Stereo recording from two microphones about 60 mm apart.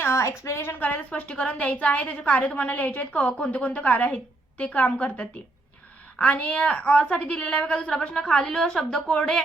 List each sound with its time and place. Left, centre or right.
0.0 s a woman's voice: left; by 9.4 s centre